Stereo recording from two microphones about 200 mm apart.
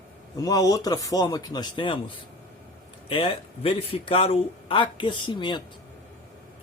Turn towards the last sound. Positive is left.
turn(degrees=25)  # may be behind; listen again after turning